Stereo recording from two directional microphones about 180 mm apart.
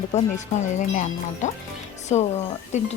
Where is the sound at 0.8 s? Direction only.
45° left (ahead or behind).